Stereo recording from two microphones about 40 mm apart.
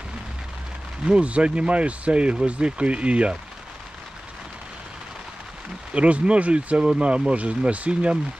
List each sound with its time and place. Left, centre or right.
1.0 s speech: right
5.9 s speech: right